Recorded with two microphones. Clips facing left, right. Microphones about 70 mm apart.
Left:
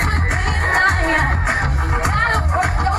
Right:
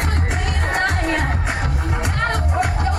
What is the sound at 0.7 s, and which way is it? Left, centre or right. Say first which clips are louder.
Music: left 4 dB; left.